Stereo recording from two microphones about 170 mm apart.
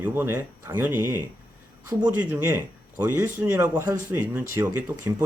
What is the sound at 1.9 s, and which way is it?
Speech, 15° right (ahead or behind).